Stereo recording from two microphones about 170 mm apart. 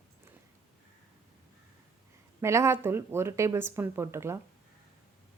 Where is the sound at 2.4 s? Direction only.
15° right (ahead or behind).